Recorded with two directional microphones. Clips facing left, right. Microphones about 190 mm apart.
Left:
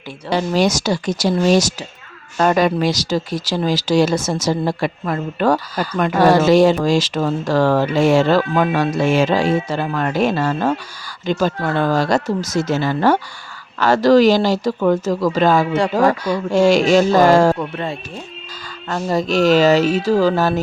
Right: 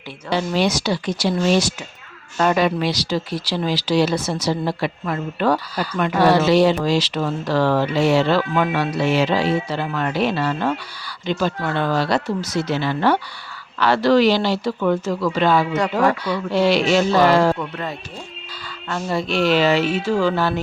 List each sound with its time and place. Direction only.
0.3 s speech: 40° left (ahead or behind)
17.6 s speech: 25° left (ahead or behind)
18.9 s speech: 40° left (ahead or behind)